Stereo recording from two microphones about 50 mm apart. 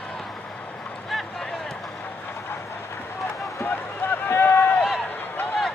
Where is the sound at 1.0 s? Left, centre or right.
Centre.